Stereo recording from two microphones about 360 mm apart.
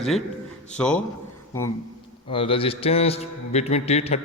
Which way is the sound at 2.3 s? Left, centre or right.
Centre.